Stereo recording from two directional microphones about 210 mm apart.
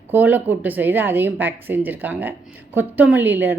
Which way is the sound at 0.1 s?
10° right (ahead or behind).